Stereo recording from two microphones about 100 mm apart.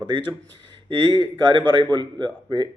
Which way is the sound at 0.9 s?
50° right (ahead or behind).